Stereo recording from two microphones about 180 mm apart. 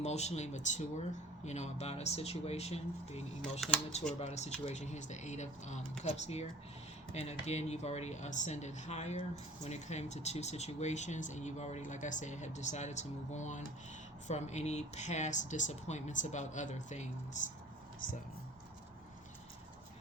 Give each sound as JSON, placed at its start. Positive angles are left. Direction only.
{"t": 0.0, "sound": "speech", "side_deg": 40}